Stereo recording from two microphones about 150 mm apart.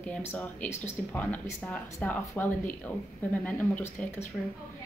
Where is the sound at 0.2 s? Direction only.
15° left (ahead or behind).